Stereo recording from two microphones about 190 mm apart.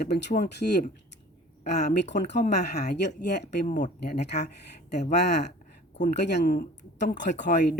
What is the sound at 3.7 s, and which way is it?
Speech, 40° left (ahead or behind).